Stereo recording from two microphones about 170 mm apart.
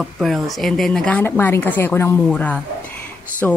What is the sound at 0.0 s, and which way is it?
A woman's voice, centre (ahead or behind).